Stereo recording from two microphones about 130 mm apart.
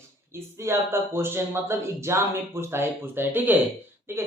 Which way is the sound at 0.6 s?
20° right (ahead or behind).